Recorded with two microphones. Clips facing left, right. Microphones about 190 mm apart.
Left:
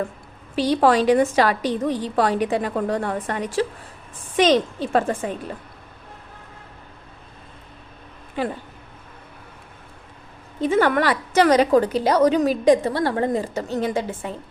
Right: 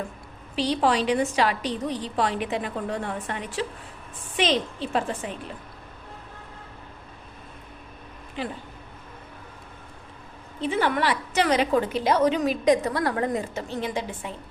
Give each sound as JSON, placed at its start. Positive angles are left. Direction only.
{"t": 0.5, "sound": "a woman's voice", "side_deg": 45}
{"t": 10.6, "sound": "a woman's voice", "side_deg": 50}